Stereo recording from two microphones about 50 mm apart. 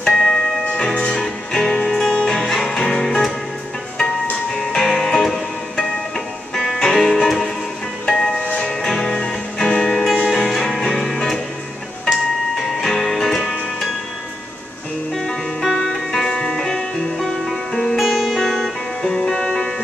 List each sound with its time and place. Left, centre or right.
0.0 s music: centre
4.6 s music: centre
10.2 s music: centre
12.5 s music: centre
15.1 s music: centre